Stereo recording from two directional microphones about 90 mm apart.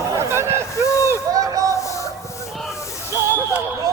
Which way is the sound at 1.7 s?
35° left (ahead or behind).